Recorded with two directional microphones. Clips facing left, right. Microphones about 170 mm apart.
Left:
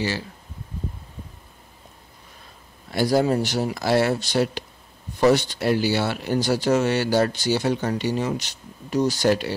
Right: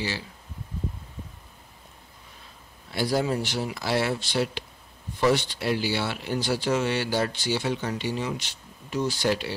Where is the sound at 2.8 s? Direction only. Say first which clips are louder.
Left 5 dB; 45° left (ahead or behind).